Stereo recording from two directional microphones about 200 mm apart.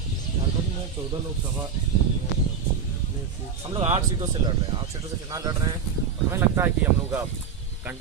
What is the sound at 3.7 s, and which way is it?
Speech, 30° right (ahead or behind).